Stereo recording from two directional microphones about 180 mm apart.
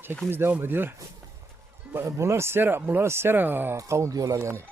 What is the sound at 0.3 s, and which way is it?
Speech, 10° right (ahead or behind).